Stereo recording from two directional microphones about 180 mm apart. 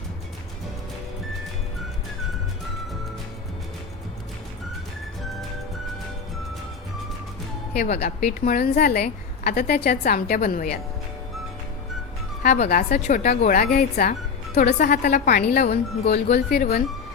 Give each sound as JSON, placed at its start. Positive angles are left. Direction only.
{"t": 7.9, "sound": "a woman's voice", "side_deg": 55}
{"t": 12.4, "sound": "speech", "side_deg": 40}
{"t": 12.6, "sound": "a woman's voice", "side_deg": 50}